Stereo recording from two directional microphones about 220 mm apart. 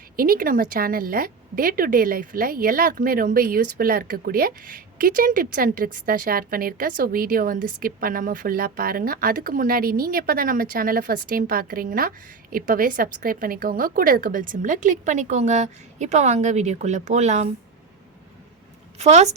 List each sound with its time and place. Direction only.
0.2 s speech: 40° right (ahead or behind)
18.9 s speech: 30° right (ahead or behind)